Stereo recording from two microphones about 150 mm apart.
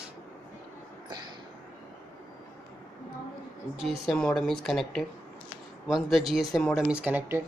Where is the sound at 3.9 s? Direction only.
5° left (ahead or behind).